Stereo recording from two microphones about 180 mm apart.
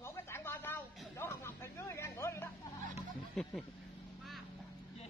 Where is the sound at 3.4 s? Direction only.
Centre (ahead or behind).